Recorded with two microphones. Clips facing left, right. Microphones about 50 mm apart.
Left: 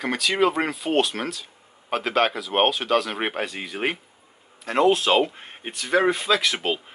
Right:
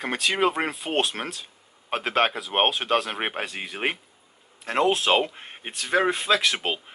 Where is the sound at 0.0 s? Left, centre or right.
Right.